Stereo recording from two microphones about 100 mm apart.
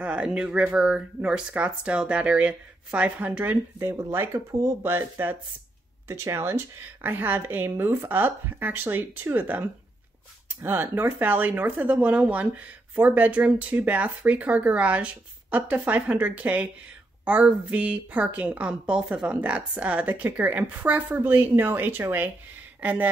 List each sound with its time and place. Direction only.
0.0 s a woman's voice: 10° right (ahead or behind)
3.8 s a woman's voice: 25° right (ahead or behind)